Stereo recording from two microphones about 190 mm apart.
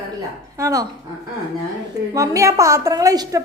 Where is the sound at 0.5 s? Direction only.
15° right (ahead or behind).